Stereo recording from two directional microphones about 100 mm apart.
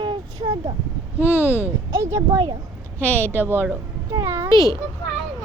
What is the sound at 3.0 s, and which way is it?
Speech, 15° left (ahead or behind).